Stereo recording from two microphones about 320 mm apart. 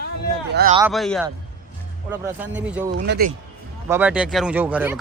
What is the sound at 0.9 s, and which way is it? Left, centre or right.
Speech, centre.